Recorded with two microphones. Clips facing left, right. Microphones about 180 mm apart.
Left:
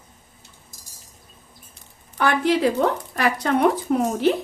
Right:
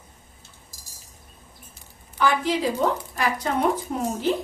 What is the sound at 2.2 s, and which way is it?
Speech, 65° left (ahead or behind).